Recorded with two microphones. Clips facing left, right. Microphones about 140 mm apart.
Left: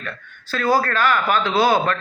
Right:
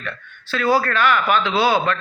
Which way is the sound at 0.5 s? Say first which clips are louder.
Right 1 dB; 40° left (ahead or behind).